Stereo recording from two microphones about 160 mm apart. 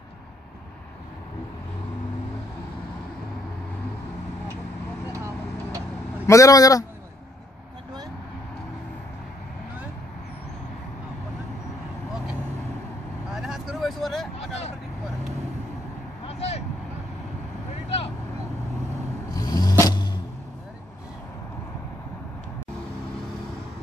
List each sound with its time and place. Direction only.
5.1 s vehicle: 20° right (ahead or behind)
6.2 s a man's voice: 20° left (ahead or behind)
13.3 s vehicle: centre (ahead or behind)
16.3 s vehicle: 40° left (ahead or behind)
19.3 s a sound: 25° left (ahead or behind)
19.8 s music: 25° left (ahead or behind)